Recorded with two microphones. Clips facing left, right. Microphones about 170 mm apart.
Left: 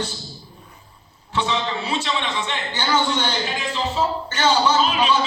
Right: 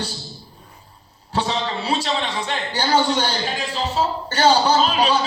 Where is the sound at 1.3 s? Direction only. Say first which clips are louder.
Even; 35° right (ahead or behind).